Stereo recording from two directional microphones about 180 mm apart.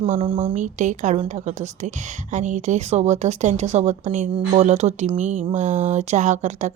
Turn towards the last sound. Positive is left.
turn(degrees=-40)  # may be behind; listen again after turning